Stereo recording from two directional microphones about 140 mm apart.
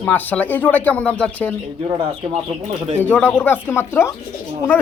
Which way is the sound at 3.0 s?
10° left (ahead or behind).